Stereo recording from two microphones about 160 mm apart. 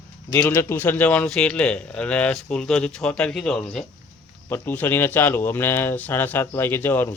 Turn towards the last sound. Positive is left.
turn(degrees=15)  # may be behind; listen again after turning